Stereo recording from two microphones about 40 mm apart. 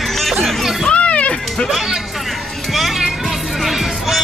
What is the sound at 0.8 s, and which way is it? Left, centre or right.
Music, left.